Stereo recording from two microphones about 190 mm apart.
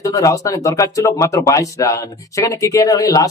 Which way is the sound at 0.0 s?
15° left (ahead or behind).